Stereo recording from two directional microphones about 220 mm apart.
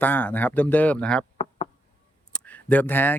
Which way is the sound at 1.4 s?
25° left (ahead or behind).